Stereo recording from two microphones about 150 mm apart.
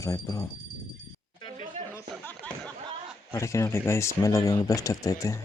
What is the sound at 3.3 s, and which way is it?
Speech, 20° left (ahead or behind).